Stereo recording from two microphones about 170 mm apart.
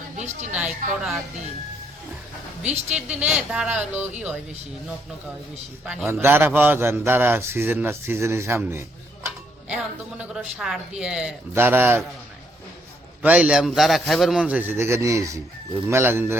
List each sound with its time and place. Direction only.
0.2 s a woman's voice: 45° right (ahead or behind)
2.6 s a man's voice: 5° right (ahead or behind)
5.8 s a man's voice: 5° right (ahead or behind)
13.2 s a man's voice: 5° right (ahead or behind)